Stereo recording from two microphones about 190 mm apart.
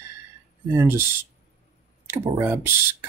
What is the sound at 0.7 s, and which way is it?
Speech, 15° right (ahead or behind).